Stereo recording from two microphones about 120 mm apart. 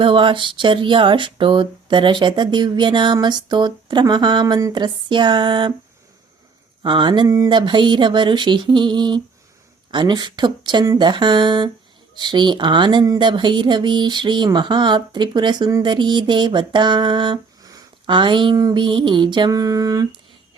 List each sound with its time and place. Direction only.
0.0 s speech: 45° right (ahead or behind)
6.8 s speech: 40° right (ahead or behind)